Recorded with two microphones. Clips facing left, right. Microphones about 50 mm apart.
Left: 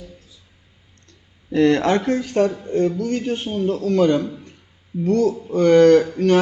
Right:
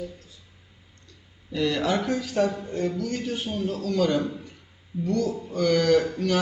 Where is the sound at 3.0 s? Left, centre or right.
Left.